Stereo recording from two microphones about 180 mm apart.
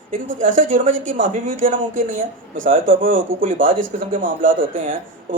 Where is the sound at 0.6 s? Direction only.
45° right (ahead or behind).